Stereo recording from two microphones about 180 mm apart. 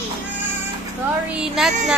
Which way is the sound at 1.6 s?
5° right (ahead or behind).